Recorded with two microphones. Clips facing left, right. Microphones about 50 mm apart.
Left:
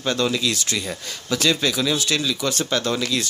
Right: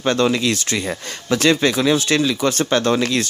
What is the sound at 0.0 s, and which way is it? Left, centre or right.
Speech, right.